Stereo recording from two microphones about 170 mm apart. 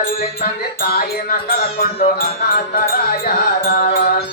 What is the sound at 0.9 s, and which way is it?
Music, 60° left (ahead or behind).